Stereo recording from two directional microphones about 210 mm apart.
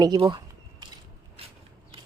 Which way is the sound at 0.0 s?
20° right (ahead or behind).